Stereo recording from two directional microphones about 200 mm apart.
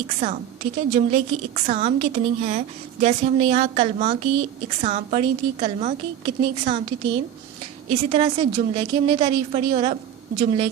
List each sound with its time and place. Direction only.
0.2 s a woman's voice: 35° right (ahead or behind)
7.9 s a woman's voice: 30° right (ahead or behind)